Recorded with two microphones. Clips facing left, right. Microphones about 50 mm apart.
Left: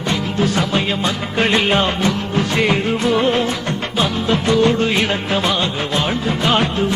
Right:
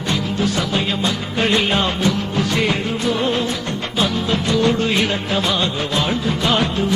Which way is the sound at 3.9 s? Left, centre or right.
Left.